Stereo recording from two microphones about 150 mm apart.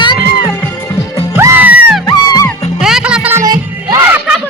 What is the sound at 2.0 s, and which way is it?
Music, 25° left (ahead or behind).